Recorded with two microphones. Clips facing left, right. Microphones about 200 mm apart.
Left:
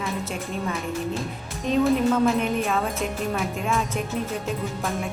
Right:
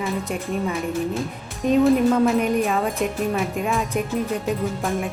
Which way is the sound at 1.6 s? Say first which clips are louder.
Right 4 dB; 10° right (ahead or behind).